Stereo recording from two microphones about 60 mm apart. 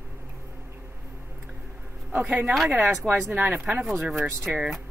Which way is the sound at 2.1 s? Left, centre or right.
Right.